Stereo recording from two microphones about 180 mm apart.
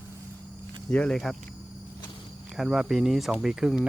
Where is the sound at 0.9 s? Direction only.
5° left (ahead or behind).